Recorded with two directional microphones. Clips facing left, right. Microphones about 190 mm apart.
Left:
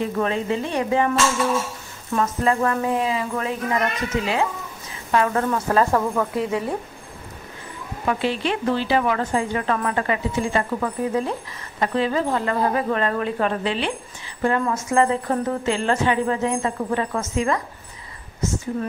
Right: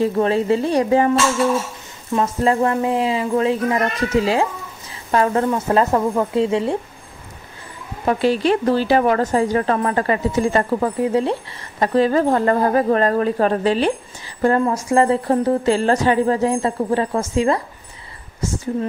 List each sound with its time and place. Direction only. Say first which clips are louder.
0.0 s speech: right 6 dB; 35° right (ahead or behind)
2.1 s speech: right 3 dB; 30° right (ahead or behind)
8.0 s speech: right 6 dB; 40° right (ahead or behind)